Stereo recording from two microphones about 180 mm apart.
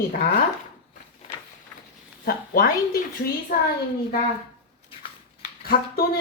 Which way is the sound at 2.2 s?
55° left (ahead or behind).